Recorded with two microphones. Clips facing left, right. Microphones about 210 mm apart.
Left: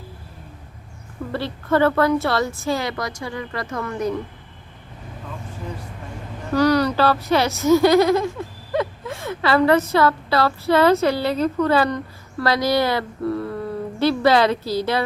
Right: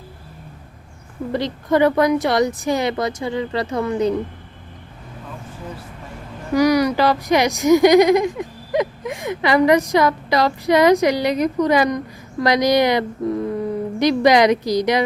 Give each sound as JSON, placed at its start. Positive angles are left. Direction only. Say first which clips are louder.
{"t": 1.3, "sound": "a child's voice", "louder": "right 2 dB", "side_deg": -15}
{"t": 6.5, "sound": "a child's voice", "louder": "right 2 dB", "side_deg": -10}